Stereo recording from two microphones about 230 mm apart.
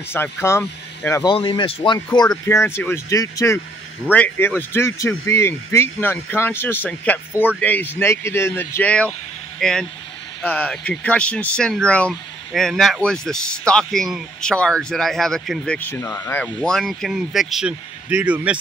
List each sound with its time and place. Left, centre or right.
0.1 s speech: centre